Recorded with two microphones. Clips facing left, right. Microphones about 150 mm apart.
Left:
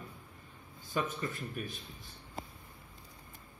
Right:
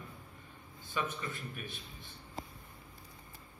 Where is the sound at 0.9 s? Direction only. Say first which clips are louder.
Left 3 dB; 45° left (ahead or behind).